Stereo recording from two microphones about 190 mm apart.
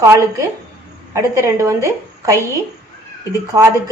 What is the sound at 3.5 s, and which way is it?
Speech, 15° right (ahead or behind).